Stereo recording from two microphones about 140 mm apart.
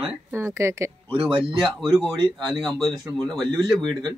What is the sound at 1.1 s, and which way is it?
Speech, 40° right (ahead or behind).